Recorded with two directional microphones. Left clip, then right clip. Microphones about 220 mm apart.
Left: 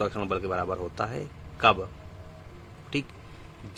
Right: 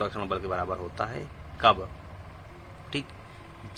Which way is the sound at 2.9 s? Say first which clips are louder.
Left 2 dB; 30° left (ahead or behind).